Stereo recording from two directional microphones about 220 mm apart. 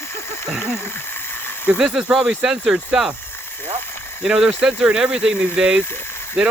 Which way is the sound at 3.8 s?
10° left (ahead or behind).